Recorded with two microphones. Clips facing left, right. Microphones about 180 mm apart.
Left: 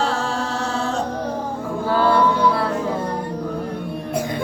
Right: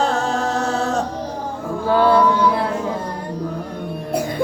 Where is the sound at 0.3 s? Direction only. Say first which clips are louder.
Right 4 dB; 40° right (ahead or behind).